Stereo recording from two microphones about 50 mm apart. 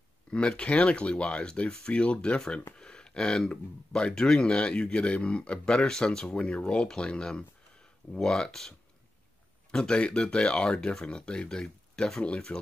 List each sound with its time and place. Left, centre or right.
0.3 s speech: centre